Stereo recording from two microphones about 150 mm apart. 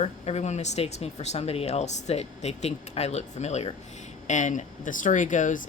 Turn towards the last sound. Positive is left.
turn(degrees=60)  # may be behind; listen again after turning